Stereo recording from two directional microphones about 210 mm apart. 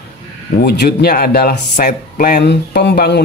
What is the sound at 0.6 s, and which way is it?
Speech, 50° left (ahead or behind).